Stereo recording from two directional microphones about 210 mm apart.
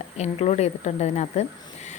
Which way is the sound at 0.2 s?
30° left (ahead or behind).